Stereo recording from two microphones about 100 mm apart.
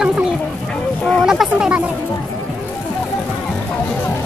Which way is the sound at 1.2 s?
5° right (ahead or behind).